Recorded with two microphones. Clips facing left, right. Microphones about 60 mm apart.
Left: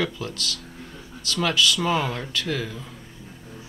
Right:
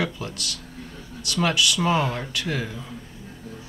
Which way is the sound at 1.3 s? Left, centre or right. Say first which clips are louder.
Even; centre.